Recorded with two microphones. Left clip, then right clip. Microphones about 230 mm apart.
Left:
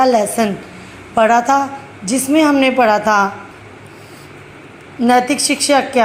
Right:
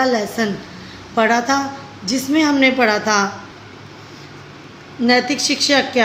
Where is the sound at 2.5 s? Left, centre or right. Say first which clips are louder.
Left 3 dB; left.